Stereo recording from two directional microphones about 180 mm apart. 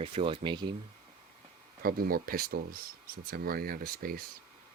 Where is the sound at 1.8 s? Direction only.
55° right (ahead or behind).